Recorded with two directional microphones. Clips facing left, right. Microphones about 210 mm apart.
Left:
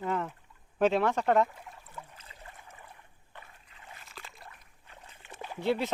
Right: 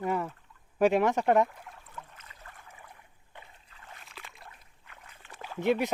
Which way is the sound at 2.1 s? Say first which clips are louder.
Left 1 dB; 30° left (ahead or behind).